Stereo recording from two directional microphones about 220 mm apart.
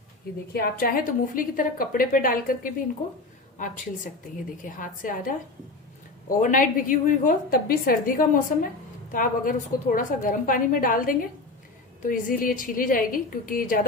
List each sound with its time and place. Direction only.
0.5 s a woman's voice: 40° left (ahead or behind)
4.6 s a woman's voice: 35° left (ahead or behind)